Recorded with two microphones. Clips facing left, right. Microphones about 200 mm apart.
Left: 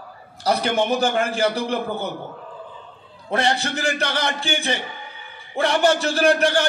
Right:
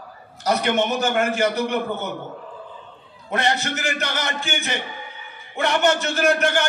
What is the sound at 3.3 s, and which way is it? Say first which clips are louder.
A man's voice: left 1 dB; 30° left (ahead or behind).